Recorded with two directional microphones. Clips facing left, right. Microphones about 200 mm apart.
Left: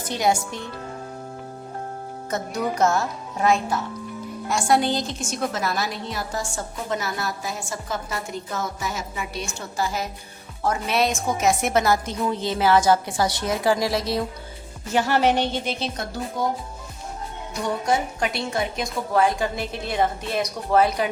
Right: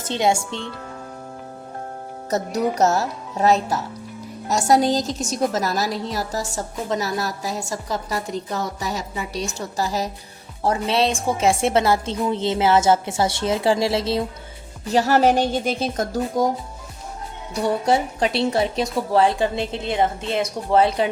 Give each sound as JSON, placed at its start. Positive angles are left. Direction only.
{"t": 0.0, "sound": "speech", "side_deg": -25}
{"t": 2.3, "sound": "a woman's voice", "side_deg": -40}
{"t": 14.9, "sound": "speech", "side_deg": -40}
{"t": 17.5, "sound": "speech", "side_deg": -35}